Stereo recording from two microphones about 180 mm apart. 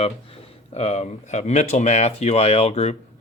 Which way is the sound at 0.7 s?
35° left (ahead or behind).